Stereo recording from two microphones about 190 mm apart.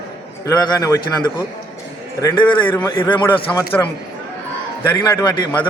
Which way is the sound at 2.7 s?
15° left (ahead or behind).